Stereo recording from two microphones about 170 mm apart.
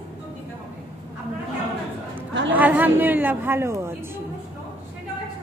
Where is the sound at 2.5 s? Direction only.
10° right (ahead or behind).